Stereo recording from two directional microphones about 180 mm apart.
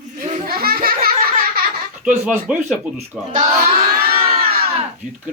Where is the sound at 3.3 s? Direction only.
50° right (ahead or behind).